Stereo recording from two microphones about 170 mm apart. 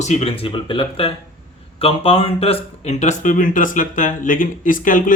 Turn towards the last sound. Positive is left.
turn(degrees=50)  # may be behind; listen again after turning